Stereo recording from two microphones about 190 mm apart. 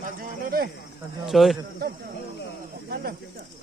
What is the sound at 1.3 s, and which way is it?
Speech, centre (ahead or behind).